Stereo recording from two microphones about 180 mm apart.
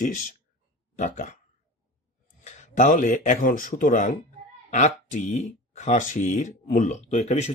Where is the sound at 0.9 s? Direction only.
40° left (ahead or behind).